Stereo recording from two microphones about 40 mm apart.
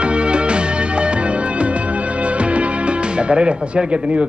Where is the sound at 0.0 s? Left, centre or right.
Right.